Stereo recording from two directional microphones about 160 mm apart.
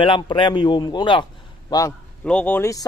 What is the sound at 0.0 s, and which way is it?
A man's voice, 30° left (ahead or behind).